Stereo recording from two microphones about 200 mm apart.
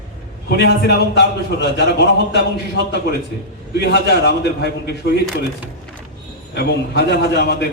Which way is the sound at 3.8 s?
55° left (ahead or behind).